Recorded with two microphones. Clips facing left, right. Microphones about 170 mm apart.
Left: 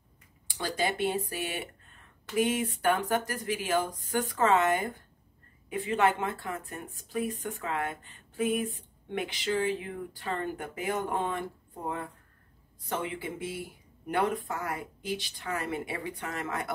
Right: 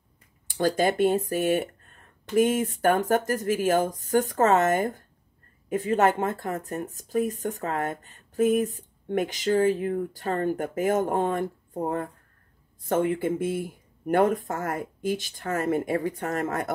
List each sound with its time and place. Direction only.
0.5 s speech: 45° right (ahead or behind)